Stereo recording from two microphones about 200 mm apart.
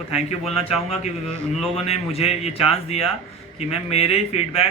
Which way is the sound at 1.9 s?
30° left (ahead or behind).